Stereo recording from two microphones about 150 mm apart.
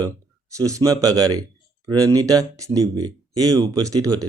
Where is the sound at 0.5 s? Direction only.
20° right (ahead or behind).